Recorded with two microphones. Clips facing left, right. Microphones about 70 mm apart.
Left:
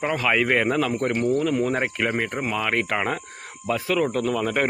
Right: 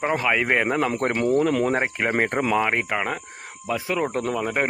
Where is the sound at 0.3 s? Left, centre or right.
Centre.